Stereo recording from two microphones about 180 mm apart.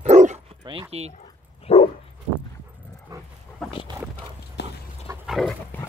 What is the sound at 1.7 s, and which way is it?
Dog, 35° left (ahead or behind).